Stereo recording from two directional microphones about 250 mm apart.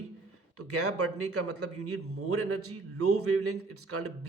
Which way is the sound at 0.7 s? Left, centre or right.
Right.